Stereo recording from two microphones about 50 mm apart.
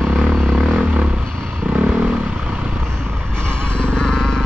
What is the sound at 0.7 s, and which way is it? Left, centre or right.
Vehicle, right.